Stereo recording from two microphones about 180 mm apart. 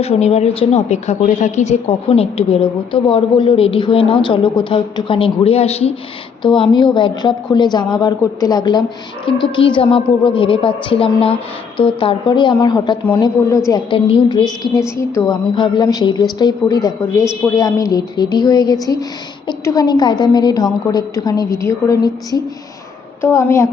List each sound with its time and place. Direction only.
0.0 s a woman's voice: 35° left (ahead or behind); by 23.6 s 15° left (ahead or behind)